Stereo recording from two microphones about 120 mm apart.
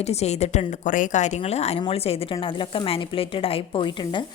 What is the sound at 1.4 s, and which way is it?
Speech, 65° left (ahead or behind).